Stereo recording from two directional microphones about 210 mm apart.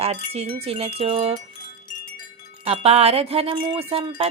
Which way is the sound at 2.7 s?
30° right (ahead or behind).